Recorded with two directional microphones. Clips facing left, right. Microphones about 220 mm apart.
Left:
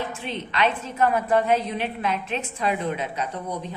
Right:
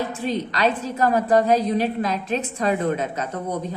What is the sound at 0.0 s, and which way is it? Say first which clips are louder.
A woman's voice: right 6 dB; 40° right (ahead or behind).